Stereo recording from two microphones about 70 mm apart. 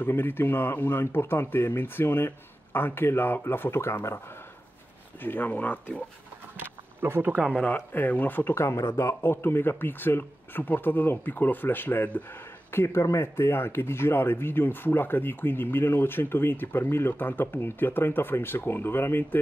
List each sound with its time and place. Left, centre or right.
0.0 s speech: left
6.5 s a sound: right
7.5 s speech: centre
8.5 s speech: left